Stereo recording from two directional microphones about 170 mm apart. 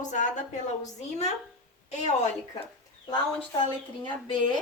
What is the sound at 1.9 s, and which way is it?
Speech, 40° left (ahead or behind).